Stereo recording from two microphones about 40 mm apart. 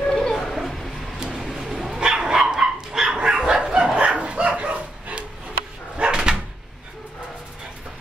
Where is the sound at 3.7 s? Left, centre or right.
Right.